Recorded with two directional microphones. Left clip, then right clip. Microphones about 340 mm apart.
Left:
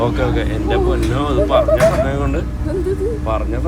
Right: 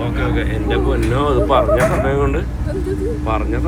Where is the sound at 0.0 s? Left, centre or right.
Centre.